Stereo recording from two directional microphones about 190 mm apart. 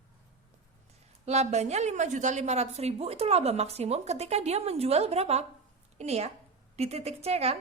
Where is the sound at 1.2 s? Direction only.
35° right (ahead or behind).